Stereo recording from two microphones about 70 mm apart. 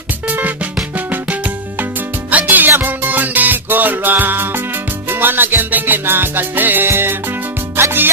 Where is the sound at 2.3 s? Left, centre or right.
Right.